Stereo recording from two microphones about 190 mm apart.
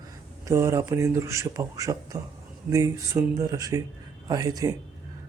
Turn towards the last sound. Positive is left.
turn(degrees=-20)  # may be behind; listen again after turning